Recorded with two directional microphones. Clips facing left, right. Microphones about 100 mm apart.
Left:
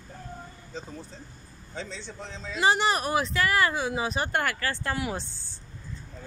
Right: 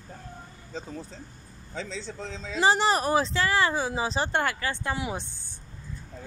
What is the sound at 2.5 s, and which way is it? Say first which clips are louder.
Speech: right 1 dB; 35° right (ahead or behind).